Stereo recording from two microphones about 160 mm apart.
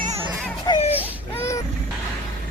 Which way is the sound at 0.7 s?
30° left (ahead or behind).